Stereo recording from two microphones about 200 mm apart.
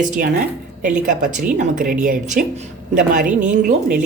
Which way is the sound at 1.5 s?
40° right (ahead or behind).